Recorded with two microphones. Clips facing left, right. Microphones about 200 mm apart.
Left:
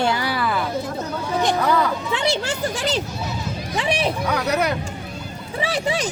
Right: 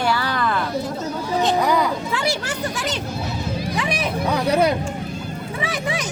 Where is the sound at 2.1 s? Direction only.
25° left (ahead or behind).